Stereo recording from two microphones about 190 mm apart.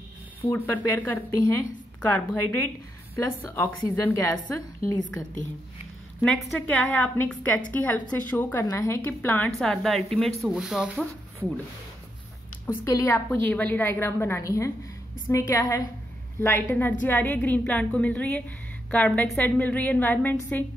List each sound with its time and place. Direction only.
0.4 s a woman's voice: 10° left (ahead or behind)
6.2 s a woman's voice: 5° left (ahead or behind)
12.6 s a woman's voice: 15° left (ahead or behind)